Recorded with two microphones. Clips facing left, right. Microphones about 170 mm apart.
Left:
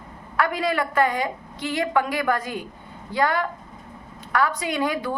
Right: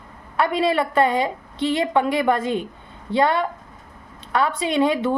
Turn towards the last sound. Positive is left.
turn(degrees=-25)  # may be behind; listen again after turning